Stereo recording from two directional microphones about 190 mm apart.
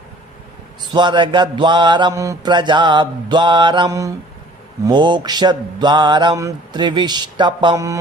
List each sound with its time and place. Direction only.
0.9 s mantra: 25° right (ahead or behind)